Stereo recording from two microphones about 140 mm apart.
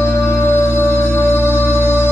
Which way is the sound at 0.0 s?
15° left (ahead or behind).